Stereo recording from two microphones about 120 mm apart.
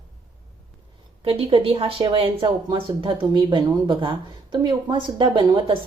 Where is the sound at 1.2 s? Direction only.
50° right (ahead or behind).